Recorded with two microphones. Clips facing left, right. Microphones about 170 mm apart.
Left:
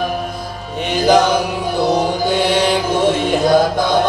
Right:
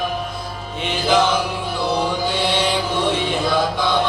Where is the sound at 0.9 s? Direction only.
40° left (ahead or behind).